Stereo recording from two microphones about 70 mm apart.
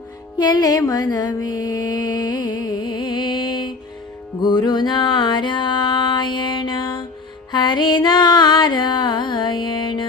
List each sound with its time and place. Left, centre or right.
0.3 s music: left
0.9 s mantra: left
4.4 s music: left